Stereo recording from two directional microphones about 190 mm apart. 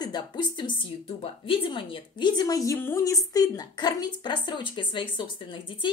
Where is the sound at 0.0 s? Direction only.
25° left (ahead or behind).